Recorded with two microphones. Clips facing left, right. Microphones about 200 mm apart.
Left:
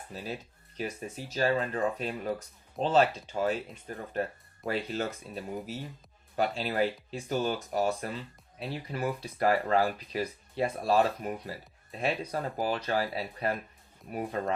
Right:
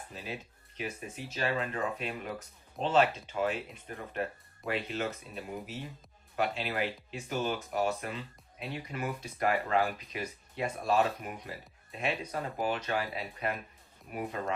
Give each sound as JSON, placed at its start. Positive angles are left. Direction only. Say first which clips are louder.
{"t": 0.8, "sound": "speech", "louder": "left 3 dB", "side_deg": 35}